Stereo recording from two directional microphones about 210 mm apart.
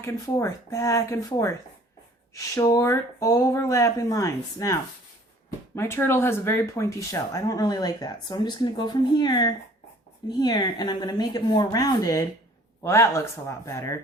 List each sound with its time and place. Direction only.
0.0 s speech: 15° left (ahead or behind)